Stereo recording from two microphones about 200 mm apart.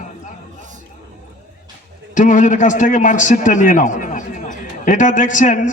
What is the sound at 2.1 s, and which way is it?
A man's voice, 40° left (ahead or behind).